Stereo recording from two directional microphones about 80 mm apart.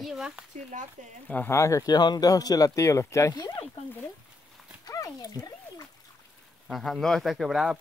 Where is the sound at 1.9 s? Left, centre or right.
Left.